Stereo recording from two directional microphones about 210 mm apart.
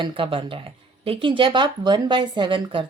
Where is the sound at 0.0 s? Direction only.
25° right (ahead or behind).